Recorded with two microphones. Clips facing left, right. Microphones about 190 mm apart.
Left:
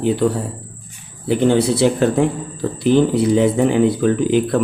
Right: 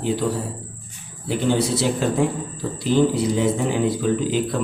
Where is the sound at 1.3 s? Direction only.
60° left (ahead or behind).